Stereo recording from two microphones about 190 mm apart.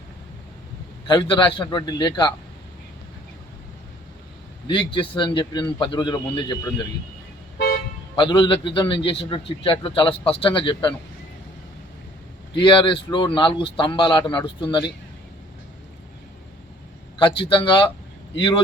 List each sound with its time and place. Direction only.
1.0 s a man's voice: 25° left (ahead or behind)
4.6 s a man's voice: 25° left (ahead or behind)
8.1 s a man's voice: 25° left (ahead or behind)
12.5 s a man's voice: 25° left (ahead or behind)
17.2 s a man's voice: 25° left (ahead or behind)